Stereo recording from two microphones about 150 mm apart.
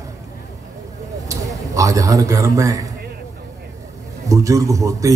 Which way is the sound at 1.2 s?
20° right (ahead or behind).